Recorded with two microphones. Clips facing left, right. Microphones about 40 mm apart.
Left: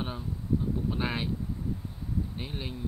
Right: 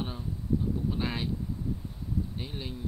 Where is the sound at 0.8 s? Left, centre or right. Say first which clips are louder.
Left 1 dB; centre.